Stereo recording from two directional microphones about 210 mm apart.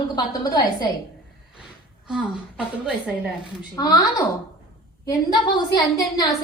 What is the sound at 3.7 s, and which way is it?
Speech, 20° left (ahead or behind).